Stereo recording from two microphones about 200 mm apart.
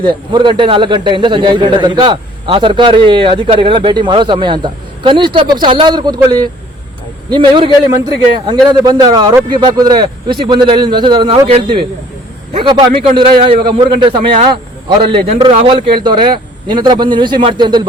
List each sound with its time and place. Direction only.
0.0 s a man's voice: 25° right (ahead or behind)
8.8 s a man's voice: 20° right (ahead or behind)